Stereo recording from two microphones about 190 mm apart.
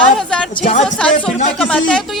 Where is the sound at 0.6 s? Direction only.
40° left (ahead or behind).